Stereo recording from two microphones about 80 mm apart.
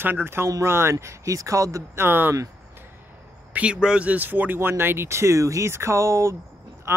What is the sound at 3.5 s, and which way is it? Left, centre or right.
Speech, centre.